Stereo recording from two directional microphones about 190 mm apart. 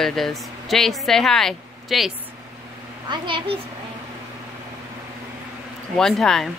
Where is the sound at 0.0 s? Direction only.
Centre (ahead or behind).